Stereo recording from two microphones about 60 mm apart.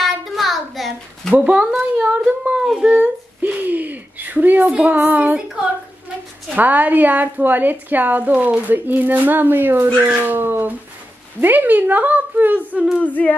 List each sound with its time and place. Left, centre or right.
0.0 s a sound: centre
1.3 s speech: centre
2.6 s speech: centre
2.9 s a woman's voice: right
13.0 s humming: left